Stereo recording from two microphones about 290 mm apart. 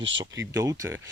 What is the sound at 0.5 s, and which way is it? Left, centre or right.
Speech, centre.